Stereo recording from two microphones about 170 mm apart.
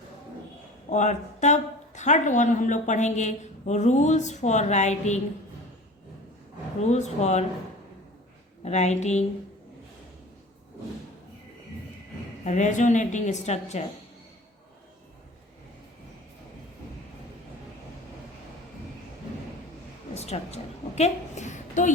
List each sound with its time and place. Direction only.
0.9 s a woman's voice: 45° left (ahead or behind)
6.8 s speech: 40° left (ahead or behind)
8.6 s speech: 40° left (ahead or behind)
12.5 s a woman's voice: 45° left (ahead or behind)
20.1 s a woman's voice: 40° left (ahead or behind)